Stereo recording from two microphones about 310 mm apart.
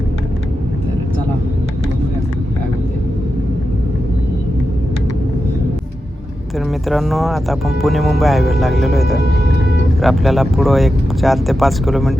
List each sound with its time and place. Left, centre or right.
6.8 s speech: centre